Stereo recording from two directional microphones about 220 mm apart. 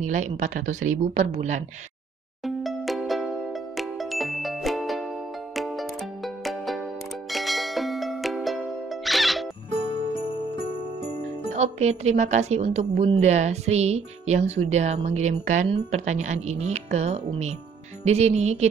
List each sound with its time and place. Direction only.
0.0 s a woman's voice: 35° right (ahead or behind)
2.4 s music: centre (ahead or behind)
11.5 s a woman's voice: 30° right (ahead or behind)